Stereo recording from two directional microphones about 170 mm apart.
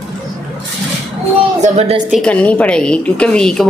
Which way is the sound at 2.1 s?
5° left (ahead or behind).